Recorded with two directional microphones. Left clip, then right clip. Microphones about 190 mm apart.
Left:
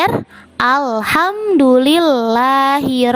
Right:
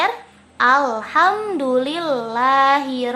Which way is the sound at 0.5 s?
50° left (ahead or behind).